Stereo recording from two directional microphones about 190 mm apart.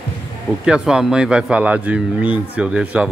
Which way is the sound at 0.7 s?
5° right (ahead or behind).